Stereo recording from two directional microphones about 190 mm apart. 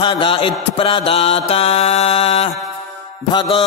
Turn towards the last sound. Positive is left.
turn(degrees=25)  # may be behind; listen again after turning